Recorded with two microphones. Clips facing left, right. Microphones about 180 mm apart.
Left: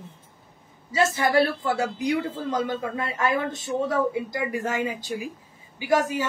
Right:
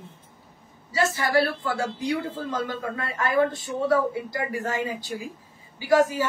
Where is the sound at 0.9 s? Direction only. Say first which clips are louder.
Left 2 dB; 20° left (ahead or behind).